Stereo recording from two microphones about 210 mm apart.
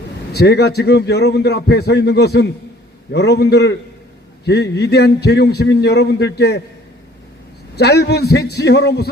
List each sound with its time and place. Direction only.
0.3 s a man's voice: 50° left (ahead or behind)
7.8 s a man's voice: 50° left (ahead or behind)